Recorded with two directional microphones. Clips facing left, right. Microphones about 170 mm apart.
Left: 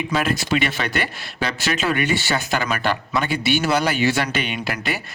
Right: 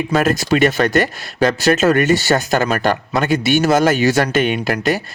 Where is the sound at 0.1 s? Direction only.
45° right (ahead or behind).